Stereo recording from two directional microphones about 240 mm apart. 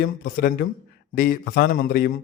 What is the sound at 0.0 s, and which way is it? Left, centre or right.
A man's voice, left.